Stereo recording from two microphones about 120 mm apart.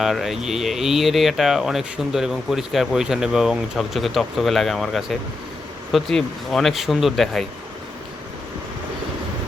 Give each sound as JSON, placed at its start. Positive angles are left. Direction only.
{"t": 0.0, "sound": "speech", "side_deg": 0}